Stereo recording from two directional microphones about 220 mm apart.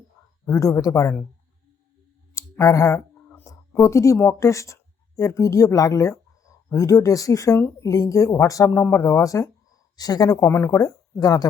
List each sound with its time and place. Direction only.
0.4 s speech: 15° left (ahead or behind)
2.3 s speech: 15° left (ahead or behind)